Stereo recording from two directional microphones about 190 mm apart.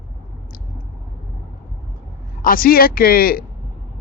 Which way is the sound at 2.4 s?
50° left (ahead or behind).